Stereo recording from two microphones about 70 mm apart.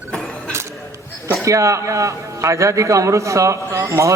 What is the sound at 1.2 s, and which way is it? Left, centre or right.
A man's voice, right.